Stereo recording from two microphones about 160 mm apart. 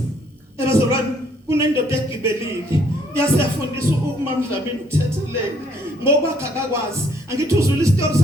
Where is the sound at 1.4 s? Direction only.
15° right (ahead or behind).